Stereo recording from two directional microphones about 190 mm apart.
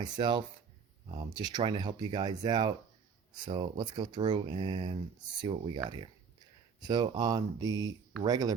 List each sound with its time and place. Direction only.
0.0 s speech: 25° right (ahead or behind)